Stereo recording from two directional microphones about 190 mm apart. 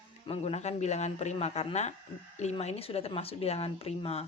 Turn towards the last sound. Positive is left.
turn(degrees=30)  # may be behind; listen again after turning